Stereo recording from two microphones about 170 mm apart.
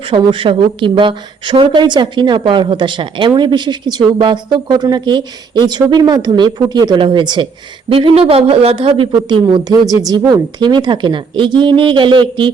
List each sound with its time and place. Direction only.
0.1 s a woman's voice: 30° right (ahead or behind)